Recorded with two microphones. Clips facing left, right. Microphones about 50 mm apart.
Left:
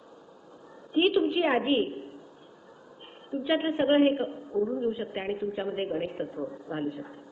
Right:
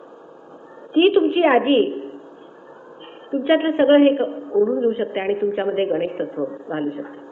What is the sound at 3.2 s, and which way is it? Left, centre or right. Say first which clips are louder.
A man's voice: right 9 dB; right.